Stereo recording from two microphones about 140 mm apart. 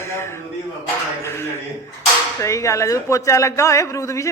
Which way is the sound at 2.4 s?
20° left (ahead or behind).